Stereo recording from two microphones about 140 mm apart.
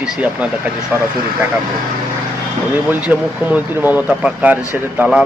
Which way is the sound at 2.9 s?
10° right (ahead or behind).